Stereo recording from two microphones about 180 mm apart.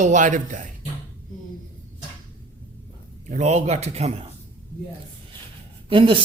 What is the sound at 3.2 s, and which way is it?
Speech, 40° right (ahead or behind).